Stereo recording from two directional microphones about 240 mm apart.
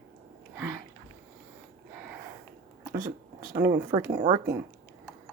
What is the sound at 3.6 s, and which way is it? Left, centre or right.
Speech, centre.